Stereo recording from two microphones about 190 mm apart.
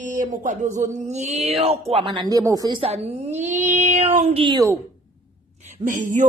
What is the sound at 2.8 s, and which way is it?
A woman's voice, 35° right (ahead or behind).